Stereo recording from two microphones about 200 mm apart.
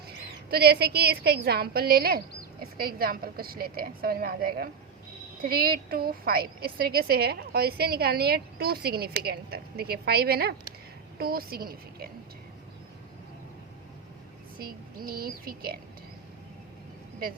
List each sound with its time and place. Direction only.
0.5 s a woman's voice: 50° right (ahead or behind)
14.6 s a woman's voice: 45° right (ahead or behind)